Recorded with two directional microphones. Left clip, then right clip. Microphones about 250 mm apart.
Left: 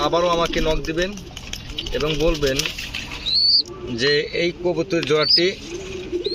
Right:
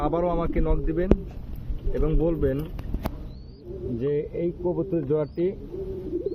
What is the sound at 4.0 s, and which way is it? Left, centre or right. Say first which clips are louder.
Speech: left 8 dB; centre.